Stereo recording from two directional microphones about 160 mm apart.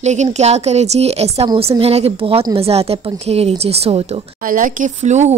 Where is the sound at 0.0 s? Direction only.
45° right (ahead or behind).